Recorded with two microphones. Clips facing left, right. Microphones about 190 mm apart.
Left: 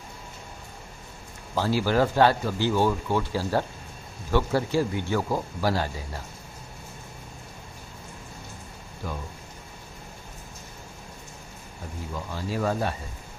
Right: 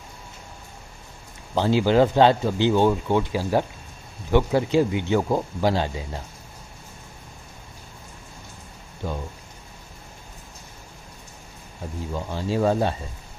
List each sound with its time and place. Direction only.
1.5 s speech: 20° right (ahead or behind)
9.0 s speech: 25° right (ahead or behind)
12.1 s speech: 25° right (ahead or behind)